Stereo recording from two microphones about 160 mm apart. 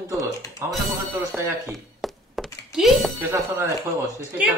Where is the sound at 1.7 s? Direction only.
Centre (ahead or behind).